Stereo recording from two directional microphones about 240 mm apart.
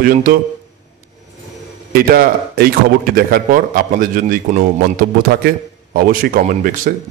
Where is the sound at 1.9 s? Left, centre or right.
Right.